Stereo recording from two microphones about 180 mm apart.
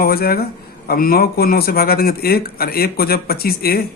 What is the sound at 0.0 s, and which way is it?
Speech, 55° left (ahead or behind).